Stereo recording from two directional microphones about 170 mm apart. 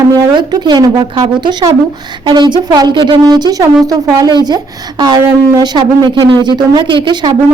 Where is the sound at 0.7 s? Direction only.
25° right (ahead or behind).